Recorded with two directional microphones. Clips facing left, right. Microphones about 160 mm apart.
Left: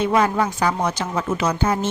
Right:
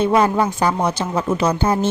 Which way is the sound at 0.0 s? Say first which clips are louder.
Right 3 dB; 30° right (ahead or behind).